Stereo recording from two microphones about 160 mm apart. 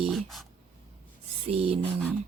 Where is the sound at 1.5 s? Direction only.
40° right (ahead or behind).